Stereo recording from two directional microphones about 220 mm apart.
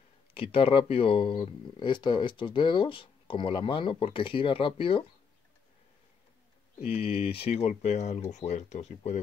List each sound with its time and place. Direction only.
0.3 s speech: 25° left (ahead or behind)
6.8 s speech: 30° left (ahead or behind)